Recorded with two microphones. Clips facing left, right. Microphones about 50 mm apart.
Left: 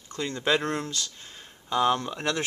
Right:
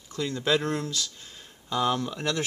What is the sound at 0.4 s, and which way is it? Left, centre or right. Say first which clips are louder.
Speech: even; centre.